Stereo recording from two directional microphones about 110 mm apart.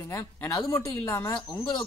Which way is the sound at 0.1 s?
35° left (ahead or behind).